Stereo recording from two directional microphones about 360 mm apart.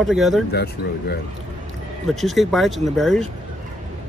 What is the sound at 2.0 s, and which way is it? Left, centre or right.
Speech, centre.